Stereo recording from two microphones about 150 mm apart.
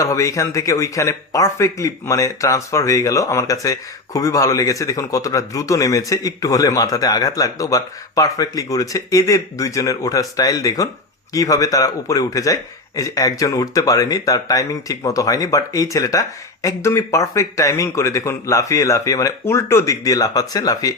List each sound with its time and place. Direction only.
0.0 s speech: 20° left (ahead or behind)